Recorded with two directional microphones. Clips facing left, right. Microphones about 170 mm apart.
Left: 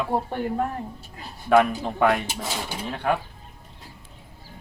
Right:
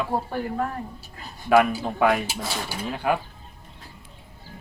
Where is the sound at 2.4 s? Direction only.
15° left (ahead or behind).